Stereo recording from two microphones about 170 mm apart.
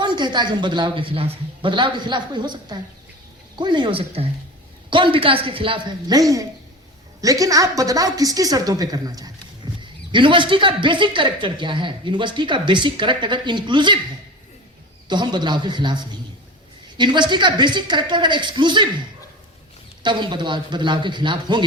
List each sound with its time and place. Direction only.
0.0 s a woman's voice: 25° right (ahead or behind)
15.0 s a woman's voice: 25° right (ahead or behind)
17.0 s a woman's voice: 25° right (ahead or behind)
20.0 s a woman's voice: 25° right (ahead or behind)